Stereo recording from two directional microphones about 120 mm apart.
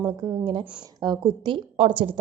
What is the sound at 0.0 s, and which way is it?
Speech, 30° right (ahead or behind).